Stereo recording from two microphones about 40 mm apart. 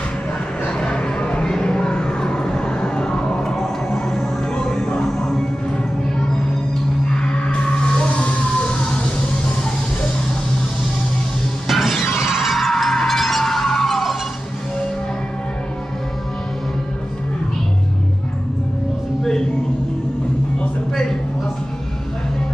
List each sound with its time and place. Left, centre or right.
0.7 s a sound: left
3.9 s music: centre
7.1 s music: left
11.6 s shatter: centre
12.7 s music: centre
20.9 s a sound: centre